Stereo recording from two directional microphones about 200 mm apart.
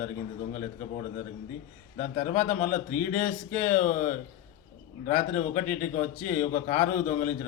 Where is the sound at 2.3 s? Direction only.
40° left (ahead or behind).